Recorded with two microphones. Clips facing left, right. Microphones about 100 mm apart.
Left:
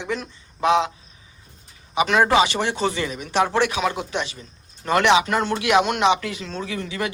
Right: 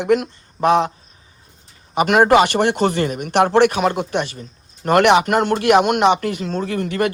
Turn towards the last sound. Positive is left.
turn(degrees=-55)  # may be behind; listen again after turning